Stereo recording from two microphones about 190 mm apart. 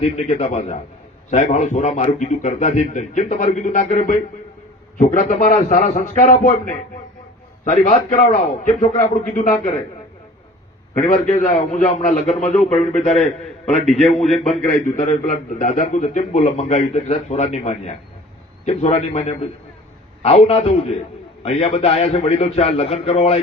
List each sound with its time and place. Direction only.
0.0 s a man's voice: 35° left (ahead or behind)
11.0 s a man's voice: 40° left (ahead or behind)
13.8 s a man's voice: centre (ahead or behind)
14.8 s a man's voice: 40° left (ahead or behind)